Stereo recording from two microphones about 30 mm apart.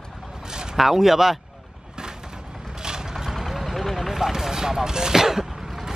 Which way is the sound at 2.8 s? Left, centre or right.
Right.